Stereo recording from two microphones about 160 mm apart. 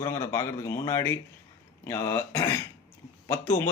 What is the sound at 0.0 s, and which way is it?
Speech, 15° left (ahead or behind).